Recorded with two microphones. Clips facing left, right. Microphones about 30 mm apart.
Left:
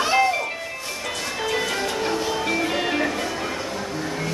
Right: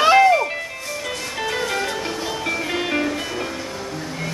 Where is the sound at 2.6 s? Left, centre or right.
Centre.